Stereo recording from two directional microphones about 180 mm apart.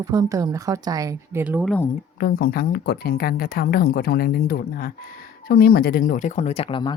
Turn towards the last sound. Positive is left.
turn(degrees=25)  # may be behind; listen again after turning